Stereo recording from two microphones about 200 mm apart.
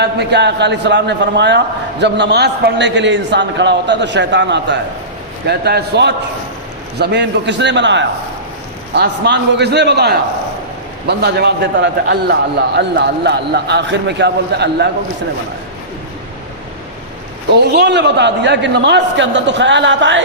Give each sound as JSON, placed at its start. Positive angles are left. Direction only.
{"t": 0.0, "sound": "a man's voice", "side_deg": -60}
{"t": 17.7, "sound": "a man's voice", "side_deg": -60}